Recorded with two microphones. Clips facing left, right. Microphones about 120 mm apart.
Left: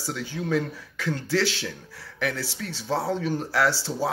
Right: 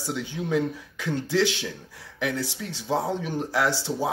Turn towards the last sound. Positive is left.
turn(degrees=-15)  # may be behind; listen again after turning